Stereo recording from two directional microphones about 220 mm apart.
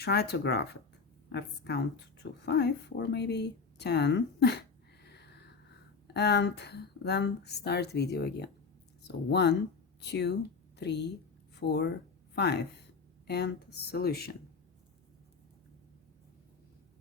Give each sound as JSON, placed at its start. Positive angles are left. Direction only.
{"t": 0.0, "sound": "speech", "side_deg": 45}
{"t": 5.0, "sound": "a sound", "side_deg": 50}
{"t": 6.1, "sound": "a woman's voice", "side_deg": 50}